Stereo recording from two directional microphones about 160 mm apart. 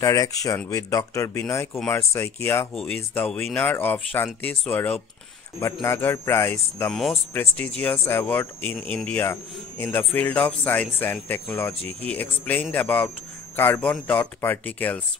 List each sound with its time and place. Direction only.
0.0 s speech: 20° left (ahead or behind)
6.9 s speech: centre (ahead or behind)